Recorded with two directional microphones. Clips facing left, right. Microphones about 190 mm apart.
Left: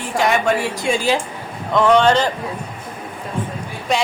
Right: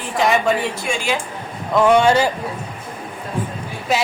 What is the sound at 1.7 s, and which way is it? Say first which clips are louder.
Speech: even; 10° right (ahead or behind).